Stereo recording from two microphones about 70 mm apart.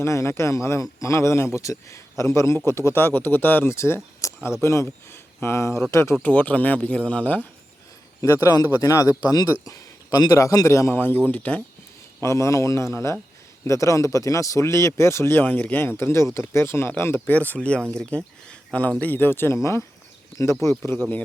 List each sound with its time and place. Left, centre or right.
0.0 s speech: left
4.2 s a sound: left
4.6 s a man's voice: left
4.9 s a man's voice: left
6.2 s a man's voice: left
8.2 s a man's voice: left
9.6 s a sound: left
10.3 s a man's voice: left
10.9 s a man's voice: left
11.3 s a man's voice: centre
12.2 s a man's voice: left
20.4 s speech: left